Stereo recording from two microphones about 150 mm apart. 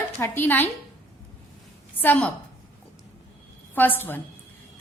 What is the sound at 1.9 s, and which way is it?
Speech, 10° left (ahead or behind).